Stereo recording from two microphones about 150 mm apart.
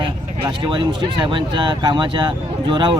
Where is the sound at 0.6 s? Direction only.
30° right (ahead or behind).